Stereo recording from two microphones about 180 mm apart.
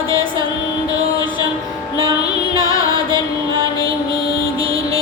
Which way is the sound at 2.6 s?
20° left (ahead or behind).